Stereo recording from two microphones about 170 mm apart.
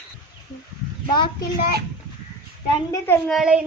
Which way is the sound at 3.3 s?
5° right (ahead or behind).